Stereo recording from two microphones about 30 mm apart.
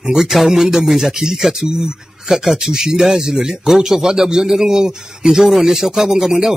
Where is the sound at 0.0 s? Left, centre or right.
Centre; by 2.0 s right.